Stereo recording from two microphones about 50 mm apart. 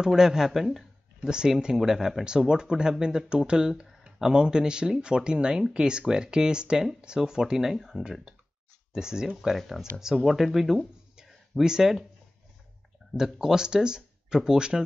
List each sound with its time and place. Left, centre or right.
0.0 s speech: centre
1.3 s speech: centre
2.2 s speech: centre
13.1 s speech: centre